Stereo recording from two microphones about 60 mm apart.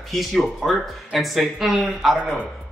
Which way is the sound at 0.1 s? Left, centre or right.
Centre.